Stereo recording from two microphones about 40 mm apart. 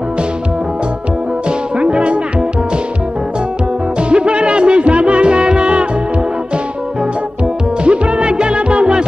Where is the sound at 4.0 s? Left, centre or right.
Right.